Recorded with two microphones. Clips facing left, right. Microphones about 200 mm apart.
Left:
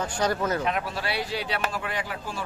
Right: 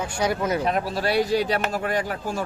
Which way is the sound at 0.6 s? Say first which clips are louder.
Right 5 dB; 35° right (ahead or behind).